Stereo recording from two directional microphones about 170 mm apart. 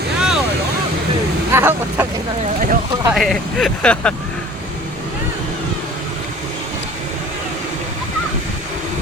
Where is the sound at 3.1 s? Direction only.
Centre (ahead or behind).